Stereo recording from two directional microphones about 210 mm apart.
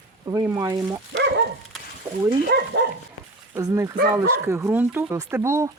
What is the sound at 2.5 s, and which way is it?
Speech, 50° right (ahead or behind).